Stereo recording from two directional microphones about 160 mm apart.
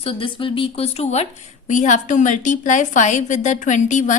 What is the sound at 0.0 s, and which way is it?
A woman's voice, 35° left (ahead or behind).